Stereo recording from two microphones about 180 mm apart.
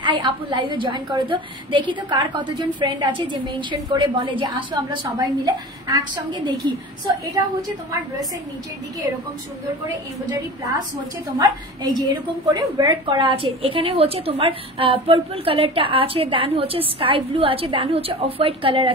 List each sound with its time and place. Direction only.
0.0 s a woman's voice: 25° right (ahead or behind)
11.3 s a woman's voice: 20° right (ahead or behind)